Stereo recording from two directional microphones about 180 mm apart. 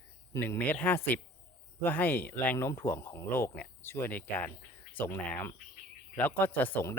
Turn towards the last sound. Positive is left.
turn(degrees=10)  # may be behind; listen again after turning